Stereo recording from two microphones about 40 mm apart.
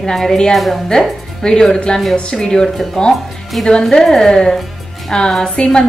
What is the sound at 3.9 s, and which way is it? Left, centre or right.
A woman's voice, centre.